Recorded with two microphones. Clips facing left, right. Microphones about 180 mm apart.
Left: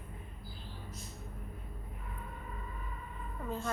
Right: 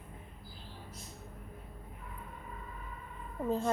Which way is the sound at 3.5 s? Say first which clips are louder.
Right 6 dB; 35° right (ahead or behind).